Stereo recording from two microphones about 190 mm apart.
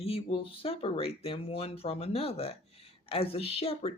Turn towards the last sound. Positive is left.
turn(degrees=30)  # may be behind; listen again after turning